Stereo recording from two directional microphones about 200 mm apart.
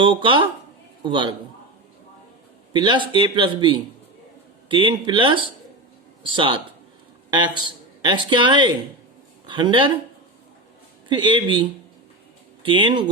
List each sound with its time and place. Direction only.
0.0 s speech: 25° right (ahead or behind)
2.7 s a man's voice: 20° right (ahead or behind)
11.1 s speech: 25° right (ahead or behind)
12.6 s speech: 25° right (ahead or behind)